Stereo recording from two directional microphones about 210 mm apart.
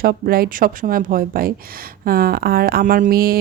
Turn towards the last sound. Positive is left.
turn(degrees=-45)  # may be behind; listen again after turning